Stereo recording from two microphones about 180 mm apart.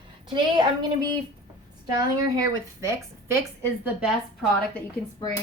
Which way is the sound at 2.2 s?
20° right (ahead or behind).